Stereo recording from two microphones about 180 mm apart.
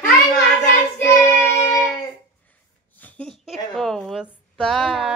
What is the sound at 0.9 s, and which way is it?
Child singing, 15° left (ahead or behind).